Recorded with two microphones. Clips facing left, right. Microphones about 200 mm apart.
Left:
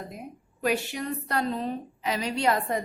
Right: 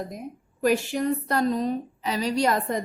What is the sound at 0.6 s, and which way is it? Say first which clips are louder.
A woman's voice: right 5 dB; 45° right (ahead or behind).